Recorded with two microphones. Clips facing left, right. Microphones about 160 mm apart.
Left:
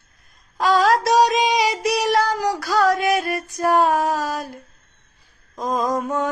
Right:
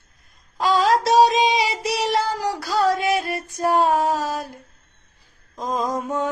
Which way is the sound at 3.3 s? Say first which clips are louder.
Left 2 dB; 25° right (ahead or behind).